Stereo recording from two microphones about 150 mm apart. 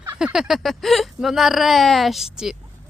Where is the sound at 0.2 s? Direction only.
5° right (ahead or behind).